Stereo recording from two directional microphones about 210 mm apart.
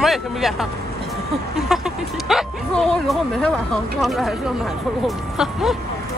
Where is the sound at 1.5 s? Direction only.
Centre (ahead or behind).